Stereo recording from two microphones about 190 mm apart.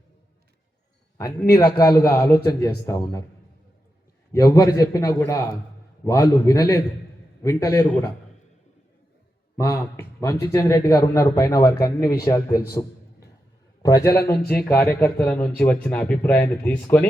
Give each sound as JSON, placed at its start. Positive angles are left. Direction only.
{"t": 1.5, "sound": "speech", "side_deg": 15}
{"t": 4.3, "sound": "speech", "side_deg": 15}
{"t": 9.6, "sound": "speech", "side_deg": 15}
{"t": 13.8, "sound": "speech", "side_deg": 20}
{"t": 14.3, "sound": "speech", "side_deg": 55}
{"t": 14.7, "sound": "speech", "side_deg": 10}